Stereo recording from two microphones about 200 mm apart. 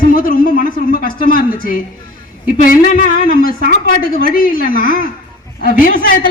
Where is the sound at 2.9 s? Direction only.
40° left (ahead or behind).